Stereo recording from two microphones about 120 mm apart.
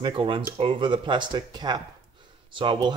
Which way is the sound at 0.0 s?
45° right (ahead or behind).